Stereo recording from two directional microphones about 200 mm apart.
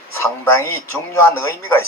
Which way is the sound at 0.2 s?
10° left (ahead or behind).